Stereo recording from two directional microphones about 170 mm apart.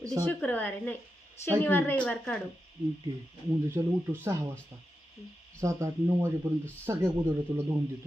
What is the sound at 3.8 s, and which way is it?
Speech, 15° right (ahead or behind).